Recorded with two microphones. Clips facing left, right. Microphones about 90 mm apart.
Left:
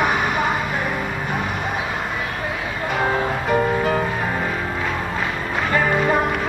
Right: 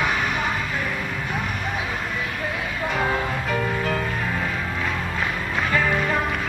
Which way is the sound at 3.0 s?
20° left (ahead or behind).